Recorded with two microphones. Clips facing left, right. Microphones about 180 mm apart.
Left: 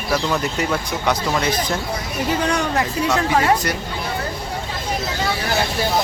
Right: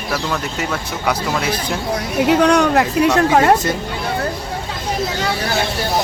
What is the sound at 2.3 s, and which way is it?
Speech, 70° right (ahead or behind).